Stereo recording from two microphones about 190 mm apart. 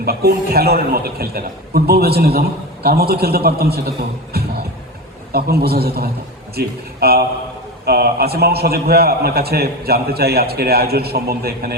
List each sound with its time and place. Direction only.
0.0 s a man's voice: 55° right (ahead or behind)